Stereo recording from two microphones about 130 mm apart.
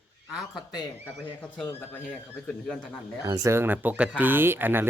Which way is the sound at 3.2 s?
25° right (ahead or behind).